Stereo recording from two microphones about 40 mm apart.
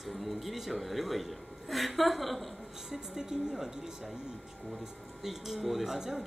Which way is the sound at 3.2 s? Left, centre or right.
Centre.